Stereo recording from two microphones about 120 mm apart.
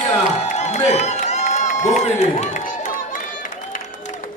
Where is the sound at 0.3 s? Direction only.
70° left (ahead or behind).